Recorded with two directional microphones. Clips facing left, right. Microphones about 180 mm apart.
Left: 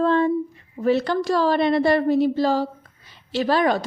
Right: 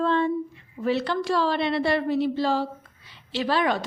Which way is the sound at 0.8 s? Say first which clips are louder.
Left 4 dB; 45° left (ahead or behind).